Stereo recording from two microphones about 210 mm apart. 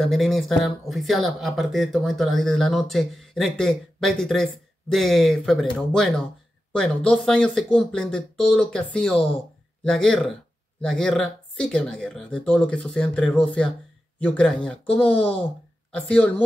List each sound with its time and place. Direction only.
0.0 s speech: centre (ahead or behind)